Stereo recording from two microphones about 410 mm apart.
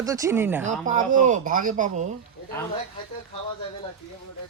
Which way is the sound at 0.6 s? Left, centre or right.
Centre.